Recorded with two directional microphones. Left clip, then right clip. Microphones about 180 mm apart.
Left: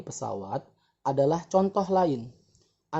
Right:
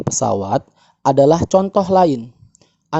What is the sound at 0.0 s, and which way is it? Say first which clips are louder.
Speech: right 16 dB; 55° right (ahead or behind).